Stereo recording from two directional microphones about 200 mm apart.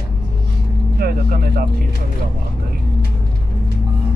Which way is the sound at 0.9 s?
50° right (ahead or behind).